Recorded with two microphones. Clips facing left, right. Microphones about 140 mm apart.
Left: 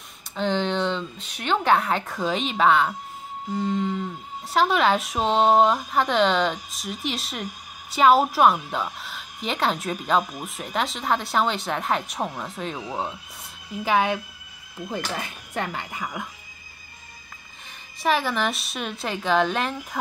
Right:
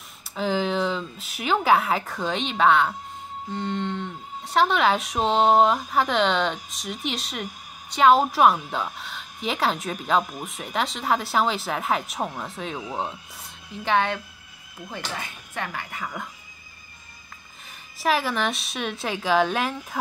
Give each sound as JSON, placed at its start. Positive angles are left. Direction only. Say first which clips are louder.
{"t": 0.4, "sound": "speech", "louder": "even", "side_deg": -5}
{"t": 13.8, "sound": "speech", "louder": "left 1 dB", "side_deg": 10}
{"t": 15.5, "sound": "speech", "louder": "left 3 dB", "side_deg": 25}
{"t": 18.0, "sound": "speech", "louder": "even", "side_deg": 0}